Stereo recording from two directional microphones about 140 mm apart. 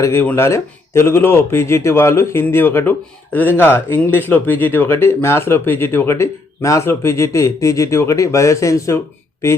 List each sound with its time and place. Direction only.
0.0 s speech: 20° left (ahead or behind)